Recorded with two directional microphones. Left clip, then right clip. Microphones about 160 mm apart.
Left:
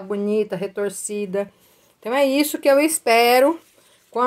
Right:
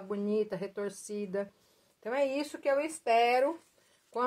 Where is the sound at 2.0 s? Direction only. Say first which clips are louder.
Left 13 dB; 15° left (ahead or behind).